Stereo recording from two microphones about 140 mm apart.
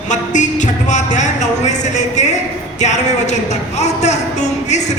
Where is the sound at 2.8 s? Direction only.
55° left (ahead or behind).